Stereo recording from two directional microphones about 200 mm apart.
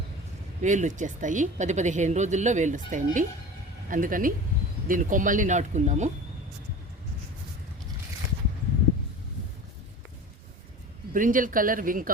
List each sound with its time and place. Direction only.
0.6 s a woman's voice: 40° right (ahead or behind)
11.1 s a woman's voice: 40° right (ahead or behind)